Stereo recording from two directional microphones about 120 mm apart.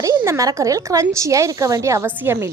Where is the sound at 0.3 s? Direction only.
25° right (ahead or behind).